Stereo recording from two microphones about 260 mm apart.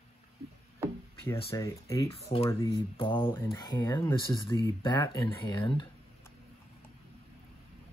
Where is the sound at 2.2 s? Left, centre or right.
Left.